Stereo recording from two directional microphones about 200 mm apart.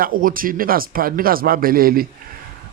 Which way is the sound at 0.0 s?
45° right (ahead or behind).